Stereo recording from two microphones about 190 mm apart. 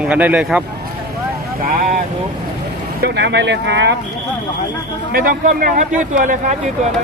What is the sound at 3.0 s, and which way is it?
Speech, 60° right (ahead or behind).